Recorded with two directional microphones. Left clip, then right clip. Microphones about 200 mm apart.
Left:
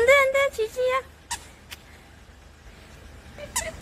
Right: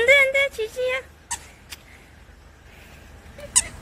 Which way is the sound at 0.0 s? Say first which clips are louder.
Right 2 dB; 25° left (ahead or behind).